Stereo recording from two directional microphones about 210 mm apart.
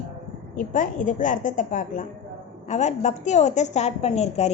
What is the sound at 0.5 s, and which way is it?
A woman's voice, 40° left (ahead or behind).